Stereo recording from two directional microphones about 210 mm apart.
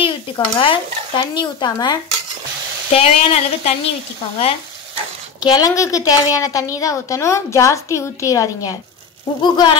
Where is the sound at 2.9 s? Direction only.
30° left (ahead or behind).